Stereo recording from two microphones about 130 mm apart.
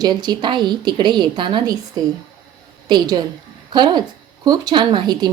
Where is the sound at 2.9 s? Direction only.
35° right (ahead or behind).